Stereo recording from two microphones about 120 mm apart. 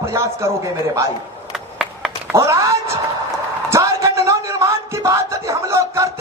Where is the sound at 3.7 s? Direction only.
25° right (ahead or behind).